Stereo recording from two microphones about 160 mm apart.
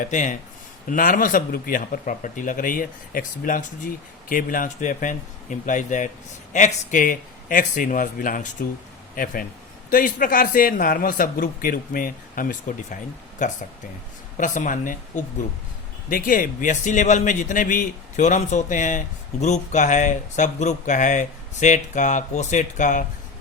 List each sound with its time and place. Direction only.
0.0 s a man's voice: 50° left (ahead or behind)